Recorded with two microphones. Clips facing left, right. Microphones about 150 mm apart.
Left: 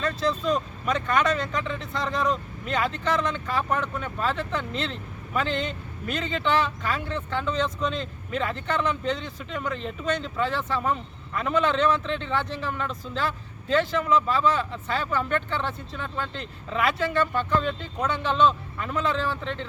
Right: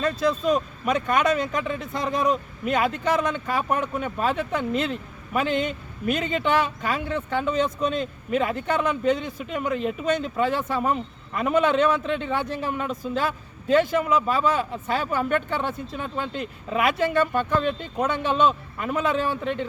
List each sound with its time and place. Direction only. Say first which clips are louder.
0.0 s a man's voice: right 3 dB; 10° right (ahead or behind)
17.3 s speech: right 2 dB; 50° right (ahead or behind)
18.3 s a man's voice: left 2 dB; 10° right (ahead or behind)